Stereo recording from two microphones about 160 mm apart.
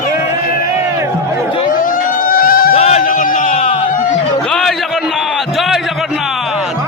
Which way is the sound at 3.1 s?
55° left (ahead or behind).